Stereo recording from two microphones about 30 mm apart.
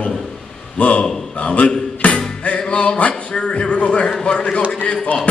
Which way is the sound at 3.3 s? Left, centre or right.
Left.